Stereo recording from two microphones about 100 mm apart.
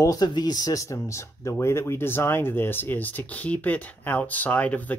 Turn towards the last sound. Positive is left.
turn(degrees=15)  # may be behind; listen again after turning